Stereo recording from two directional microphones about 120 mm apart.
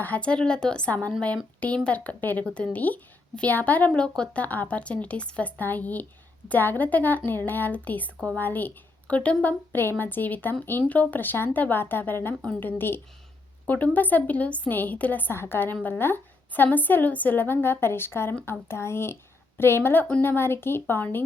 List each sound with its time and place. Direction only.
0.0 s a woman's voice: 10° left (ahead or behind)